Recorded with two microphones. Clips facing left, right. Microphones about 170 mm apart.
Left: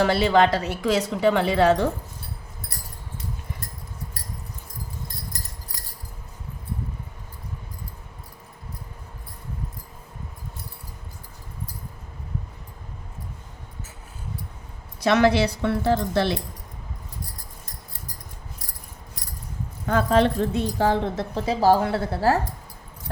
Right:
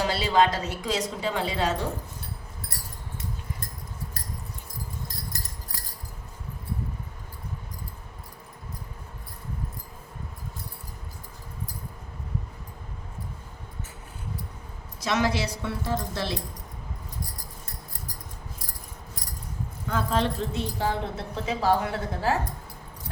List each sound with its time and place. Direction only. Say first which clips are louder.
0.0 s a woman's voice: left 4 dB; 60° left (ahead or behind)
15.0 s a woman's voice: left 7 dB; 60° left (ahead or behind)
19.9 s a woman's voice: left 7 dB; 65° left (ahead or behind)
21.2 s a woman's voice: left 6 dB; 35° left (ahead or behind)